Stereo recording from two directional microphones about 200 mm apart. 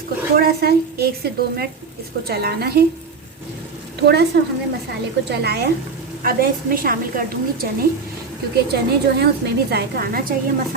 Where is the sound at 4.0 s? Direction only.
55° right (ahead or behind).